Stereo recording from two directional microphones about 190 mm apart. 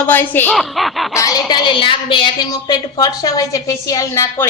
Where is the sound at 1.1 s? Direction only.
15° left (ahead or behind).